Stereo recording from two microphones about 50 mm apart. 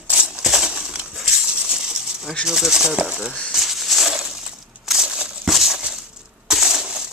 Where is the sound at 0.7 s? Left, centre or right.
Centre.